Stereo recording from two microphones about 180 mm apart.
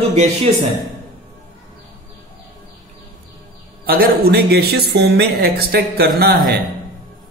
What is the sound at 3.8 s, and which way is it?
A woman's voice, 60° right (ahead or behind).